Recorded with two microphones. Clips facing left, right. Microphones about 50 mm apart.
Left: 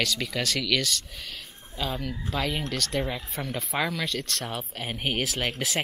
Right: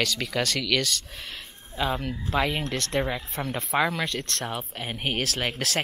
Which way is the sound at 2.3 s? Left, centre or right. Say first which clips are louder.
Right 4 dB; right.